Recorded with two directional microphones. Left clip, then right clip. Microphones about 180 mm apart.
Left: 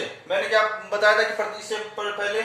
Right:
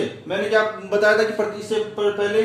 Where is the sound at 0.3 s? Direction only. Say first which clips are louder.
Right 1 dB; 10° right (ahead or behind).